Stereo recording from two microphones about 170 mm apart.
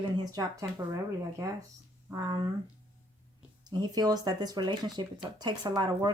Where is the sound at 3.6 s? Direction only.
25° right (ahead or behind).